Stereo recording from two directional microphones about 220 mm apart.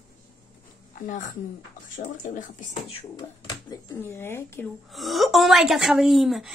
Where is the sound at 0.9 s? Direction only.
35° left (ahead or behind).